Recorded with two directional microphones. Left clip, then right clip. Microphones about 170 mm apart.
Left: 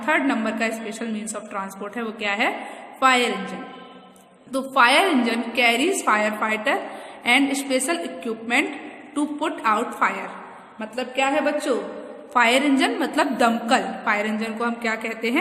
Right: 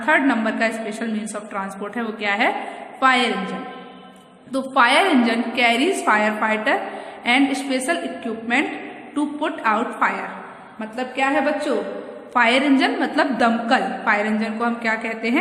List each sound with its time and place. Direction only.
0.0 s a woman's voice: 20° left (ahead or behind)
4.5 s a woman's voice: 25° left (ahead or behind)